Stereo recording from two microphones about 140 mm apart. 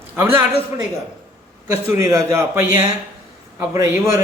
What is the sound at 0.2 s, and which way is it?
A man's voice, 15° right (ahead or behind).